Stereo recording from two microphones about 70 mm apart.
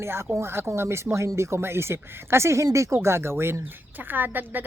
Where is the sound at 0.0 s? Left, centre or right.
Right.